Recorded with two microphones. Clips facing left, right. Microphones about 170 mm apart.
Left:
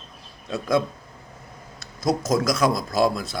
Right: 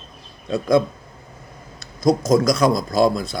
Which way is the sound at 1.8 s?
5° left (ahead or behind).